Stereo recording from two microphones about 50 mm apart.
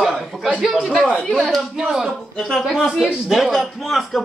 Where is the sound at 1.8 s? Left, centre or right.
Centre.